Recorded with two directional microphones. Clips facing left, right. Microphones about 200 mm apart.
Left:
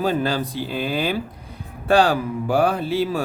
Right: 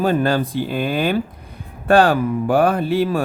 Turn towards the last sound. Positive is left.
turn(degrees=-55)  # may be behind; listen again after turning